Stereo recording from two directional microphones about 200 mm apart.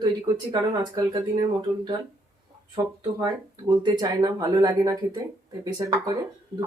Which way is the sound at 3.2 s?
20° right (ahead or behind).